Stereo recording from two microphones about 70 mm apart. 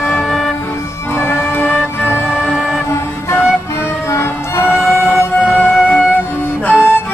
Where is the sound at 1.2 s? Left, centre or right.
Left.